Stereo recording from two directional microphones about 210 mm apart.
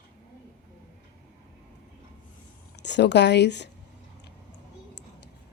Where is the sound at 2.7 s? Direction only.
55° left (ahead or behind).